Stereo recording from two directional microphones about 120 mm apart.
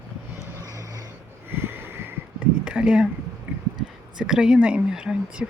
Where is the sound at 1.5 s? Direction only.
20° right (ahead or behind).